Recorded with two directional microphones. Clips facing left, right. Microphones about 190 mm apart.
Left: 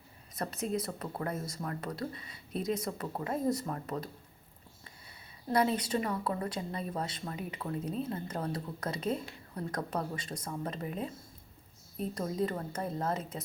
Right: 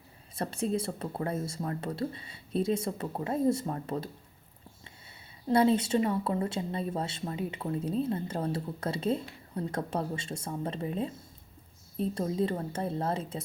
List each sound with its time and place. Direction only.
0.3 s speech: 30° right (ahead or behind)
5.5 s speech: 25° right (ahead or behind)